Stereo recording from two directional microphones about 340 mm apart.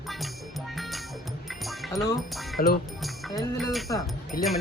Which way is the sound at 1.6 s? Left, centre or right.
Centre.